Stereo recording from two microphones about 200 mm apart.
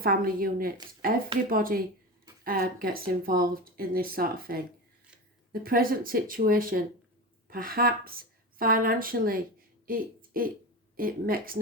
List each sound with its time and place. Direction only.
0.0 s speech: 45° right (ahead or behind)